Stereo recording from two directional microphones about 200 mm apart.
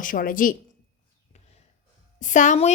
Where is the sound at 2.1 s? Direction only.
40° left (ahead or behind).